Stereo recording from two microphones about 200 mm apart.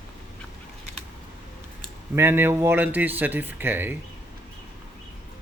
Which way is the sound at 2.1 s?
10° right (ahead or behind).